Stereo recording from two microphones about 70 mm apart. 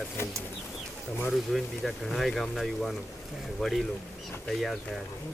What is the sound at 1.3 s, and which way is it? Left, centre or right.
Speech, centre.